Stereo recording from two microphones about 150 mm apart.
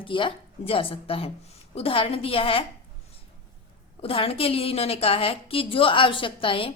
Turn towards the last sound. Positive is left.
turn(degrees=35)  # may be behind; listen again after turning